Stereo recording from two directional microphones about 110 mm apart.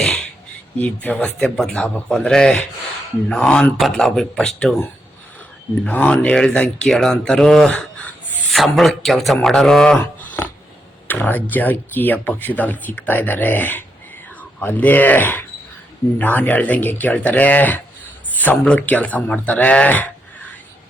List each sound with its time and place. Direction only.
0.0 s a sound: 5° left (ahead or behind)
0.8 s speech: 15° left (ahead or behind)
5.8 s speech: 10° left (ahead or behind)